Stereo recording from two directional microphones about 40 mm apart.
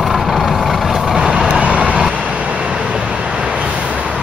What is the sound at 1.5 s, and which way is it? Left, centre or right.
Vehicle, right.